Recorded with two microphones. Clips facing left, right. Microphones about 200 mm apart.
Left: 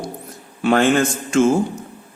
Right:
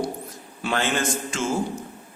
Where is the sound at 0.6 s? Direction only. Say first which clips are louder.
Left 10 dB; 60° left (ahead or behind).